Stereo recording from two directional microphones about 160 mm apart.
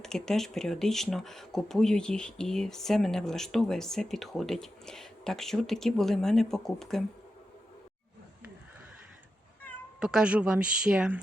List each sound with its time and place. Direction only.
0.0 s speech: 5° left (ahead or behind)
10.0 s speech: 5° right (ahead or behind)